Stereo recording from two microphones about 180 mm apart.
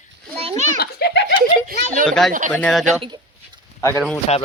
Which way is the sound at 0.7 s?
65° left (ahead or behind).